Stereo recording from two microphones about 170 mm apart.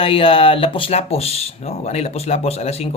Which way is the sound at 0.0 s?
30° left (ahead or behind).